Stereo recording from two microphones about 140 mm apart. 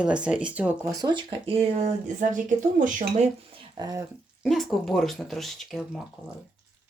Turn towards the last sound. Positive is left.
turn(degrees=0)  # may be behind; listen again after turning